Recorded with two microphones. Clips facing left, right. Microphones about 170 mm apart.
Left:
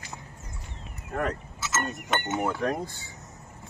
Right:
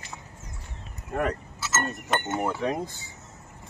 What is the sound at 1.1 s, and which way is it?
Creak, 5° right (ahead or behind).